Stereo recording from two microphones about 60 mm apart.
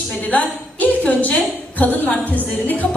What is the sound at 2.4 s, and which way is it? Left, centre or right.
Music, left.